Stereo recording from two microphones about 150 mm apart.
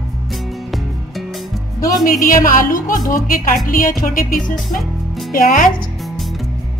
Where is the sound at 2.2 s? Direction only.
65° left (ahead or behind).